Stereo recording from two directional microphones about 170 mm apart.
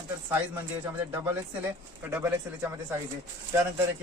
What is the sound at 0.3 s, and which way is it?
Speech, 10° right (ahead or behind).